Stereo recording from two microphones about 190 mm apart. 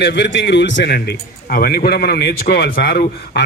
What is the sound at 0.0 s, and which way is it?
A man's voice, 65° left (ahead or behind).